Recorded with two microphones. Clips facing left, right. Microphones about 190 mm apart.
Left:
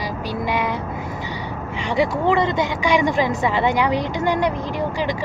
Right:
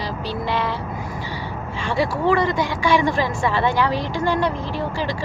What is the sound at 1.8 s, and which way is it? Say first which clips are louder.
A woman's voice: left 1 dB; 20° left (ahead or behind).